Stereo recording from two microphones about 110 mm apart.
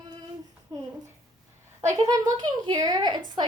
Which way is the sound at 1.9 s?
35° right (ahead or behind).